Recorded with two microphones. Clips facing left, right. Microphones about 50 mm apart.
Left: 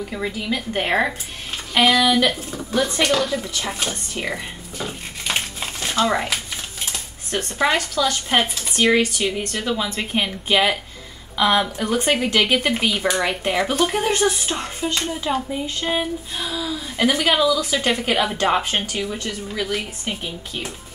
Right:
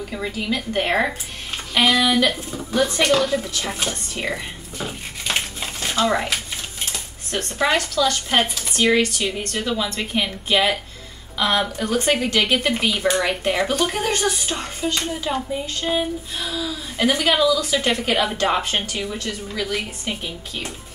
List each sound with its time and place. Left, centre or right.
0.1 s a woman's voice: centre
15.6 s a woman's voice: centre